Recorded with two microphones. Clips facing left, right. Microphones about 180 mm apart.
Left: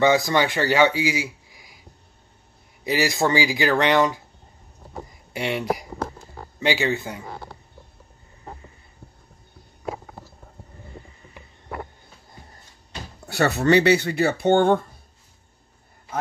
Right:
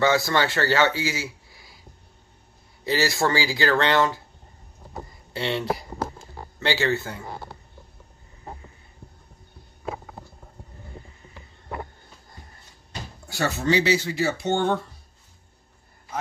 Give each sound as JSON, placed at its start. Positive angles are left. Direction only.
{"t": 0.0, "sound": "a man's voice", "side_deg": 15}
{"t": 2.8, "sound": "speech", "side_deg": 15}
{"t": 5.3, "sound": "speech", "side_deg": 15}
{"t": 13.3, "sound": "speech", "side_deg": 65}